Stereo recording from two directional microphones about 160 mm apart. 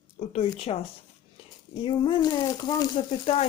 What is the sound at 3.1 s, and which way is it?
Speech, 40° left (ahead or behind).